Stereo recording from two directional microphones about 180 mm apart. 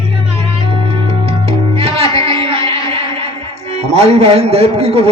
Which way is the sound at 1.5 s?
35° right (ahead or behind).